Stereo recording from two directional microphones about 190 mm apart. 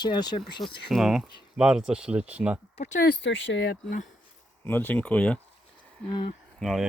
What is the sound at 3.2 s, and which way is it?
Speech, 75° left (ahead or behind).